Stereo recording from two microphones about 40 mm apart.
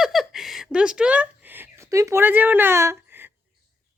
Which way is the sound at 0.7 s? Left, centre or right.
Right.